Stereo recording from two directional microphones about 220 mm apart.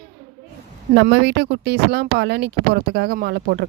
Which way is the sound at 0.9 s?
50° right (ahead or behind).